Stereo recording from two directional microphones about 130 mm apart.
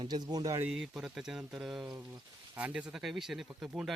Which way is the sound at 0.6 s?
5° right (ahead or behind).